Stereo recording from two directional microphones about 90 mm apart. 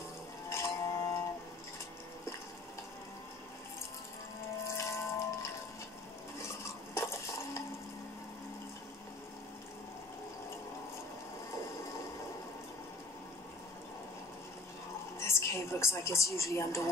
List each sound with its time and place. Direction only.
0.5 s a sound: 30° left (ahead or behind)
4.6 s water: 35° left (ahead or behind)
6.3 s stir: 30° left (ahead or behind)
15.1 s a woman's voice: 30° left (ahead or behind)